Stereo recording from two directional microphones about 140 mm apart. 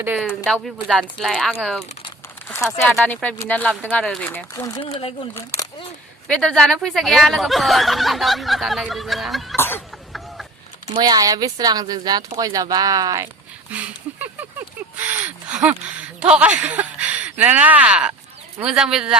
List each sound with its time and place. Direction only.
0.2 s speech: centre (ahead or behind)
2.5 s speech: 20° left (ahead or behind)
2.8 s speech: 10° left (ahead or behind)
4.8 s speech: 40° left (ahead or behind)
5.3 s speech: 25° left (ahead or behind)
6.2 s speech: 5° left (ahead or behind)
9.6 s a sound: 15° left (ahead or behind)
10.9 s speech: 30° right (ahead or behind)
13.7 s speech: 10° right (ahead or behind)
14.9 s a sound: 10° right (ahead or behind)
16.2 s speech: 10° right (ahead or behind)